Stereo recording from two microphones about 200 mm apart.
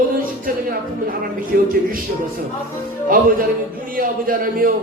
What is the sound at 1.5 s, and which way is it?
Speech, 50° right (ahead or behind).